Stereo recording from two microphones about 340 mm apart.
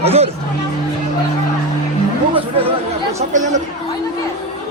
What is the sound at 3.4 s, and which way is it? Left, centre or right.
Chatter, right.